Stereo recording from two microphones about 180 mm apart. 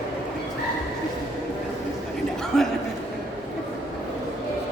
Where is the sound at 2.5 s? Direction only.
5° left (ahead or behind).